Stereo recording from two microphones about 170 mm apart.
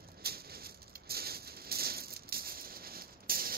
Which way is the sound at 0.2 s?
65° right (ahead or behind).